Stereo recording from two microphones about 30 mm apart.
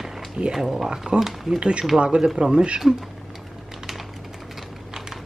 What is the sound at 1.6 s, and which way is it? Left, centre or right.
Speech, right.